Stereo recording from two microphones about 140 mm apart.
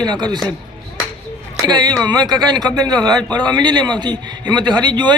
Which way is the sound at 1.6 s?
30° right (ahead or behind).